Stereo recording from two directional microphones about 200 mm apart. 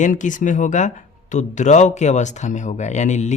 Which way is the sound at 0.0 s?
40° left (ahead or behind).